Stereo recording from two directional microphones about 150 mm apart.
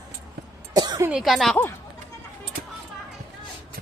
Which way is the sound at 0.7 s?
25° right (ahead or behind).